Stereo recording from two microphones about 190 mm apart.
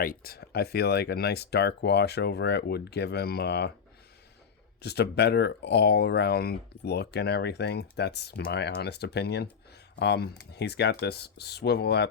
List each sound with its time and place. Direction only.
0.0 s speech: 50° left (ahead or behind)
4.8 s speech: 60° left (ahead or behind)